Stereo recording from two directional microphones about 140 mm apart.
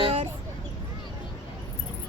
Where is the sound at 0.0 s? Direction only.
45° right (ahead or behind).